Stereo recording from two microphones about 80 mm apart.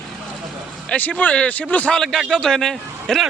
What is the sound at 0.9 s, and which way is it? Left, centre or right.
Speech, centre.